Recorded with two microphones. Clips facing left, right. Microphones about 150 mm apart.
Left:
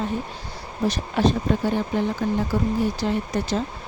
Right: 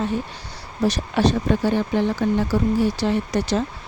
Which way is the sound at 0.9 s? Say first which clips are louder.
Right 1 dB; 75° right (ahead or behind).